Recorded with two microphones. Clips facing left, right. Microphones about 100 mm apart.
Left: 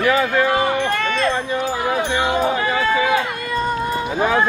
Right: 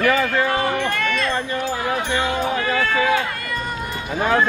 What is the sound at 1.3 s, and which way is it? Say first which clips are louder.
Speech: left 2 dB; 10° left (ahead or behind).